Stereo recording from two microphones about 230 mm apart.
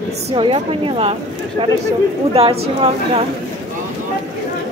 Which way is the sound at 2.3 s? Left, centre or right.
Right.